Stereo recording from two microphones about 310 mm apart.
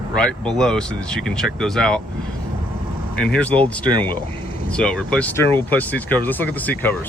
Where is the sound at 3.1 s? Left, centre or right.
Centre.